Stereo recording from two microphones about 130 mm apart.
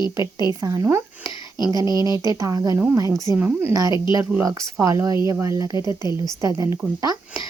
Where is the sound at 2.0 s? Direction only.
25° right (ahead or behind).